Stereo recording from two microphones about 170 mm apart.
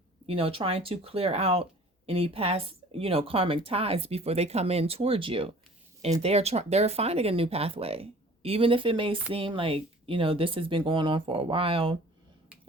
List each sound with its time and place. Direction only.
0.3 s speech: 35° right (ahead or behind)